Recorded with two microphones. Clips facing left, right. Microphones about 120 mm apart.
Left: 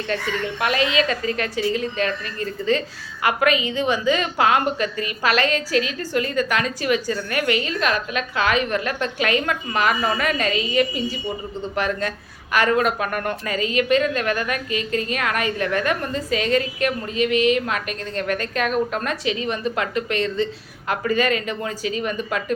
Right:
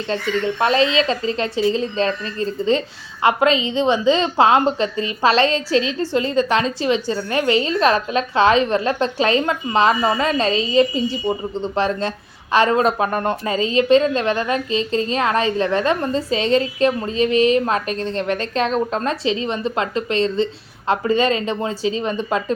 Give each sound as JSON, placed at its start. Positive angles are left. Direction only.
{"t": 0.1, "sound": "a woman's voice", "side_deg": -30}